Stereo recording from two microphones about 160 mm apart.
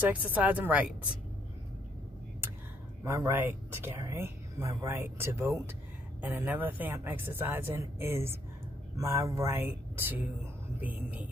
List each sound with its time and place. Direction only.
0.0 s speech: 10° right (ahead or behind)
3.0 s speech: 15° right (ahead or behind)